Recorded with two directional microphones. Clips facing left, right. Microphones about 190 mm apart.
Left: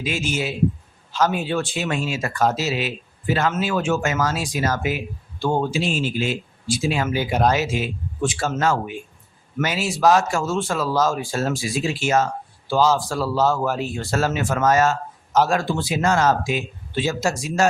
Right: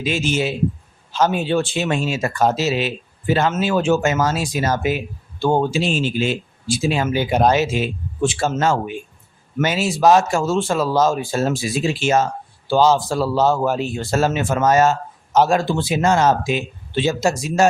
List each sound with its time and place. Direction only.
0.0 s speech: 25° right (ahead or behind)